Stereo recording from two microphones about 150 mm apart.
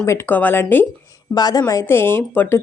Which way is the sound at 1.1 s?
25° left (ahead or behind).